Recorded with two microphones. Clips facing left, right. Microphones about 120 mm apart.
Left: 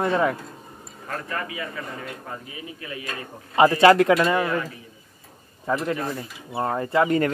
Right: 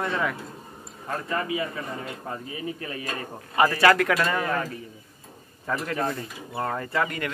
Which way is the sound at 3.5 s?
25° left (ahead or behind).